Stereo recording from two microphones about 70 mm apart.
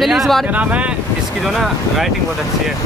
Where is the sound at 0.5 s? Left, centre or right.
Centre.